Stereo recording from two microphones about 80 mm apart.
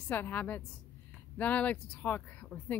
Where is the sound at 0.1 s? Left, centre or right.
Left.